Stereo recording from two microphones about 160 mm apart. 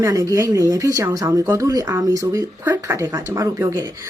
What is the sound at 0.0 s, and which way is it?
Speech, 20° right (ahead or behind).